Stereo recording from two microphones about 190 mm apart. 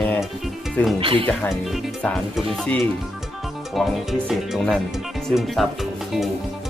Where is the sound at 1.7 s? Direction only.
Centre (ahead or behind).